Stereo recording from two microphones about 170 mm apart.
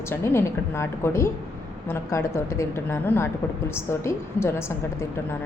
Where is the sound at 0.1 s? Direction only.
15° left (ahead or behind).